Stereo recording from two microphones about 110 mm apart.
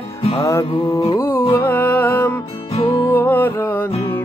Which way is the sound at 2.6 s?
60° left (ahead or behind).